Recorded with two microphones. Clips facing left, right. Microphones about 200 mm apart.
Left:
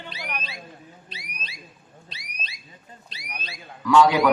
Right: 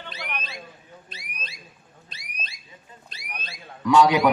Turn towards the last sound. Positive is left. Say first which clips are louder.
# even
turn(degrees=-20)  # may be behind; listen again after turning